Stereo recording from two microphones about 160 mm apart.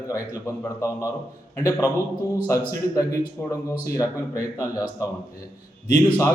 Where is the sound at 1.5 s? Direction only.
20° left (ahead or behind).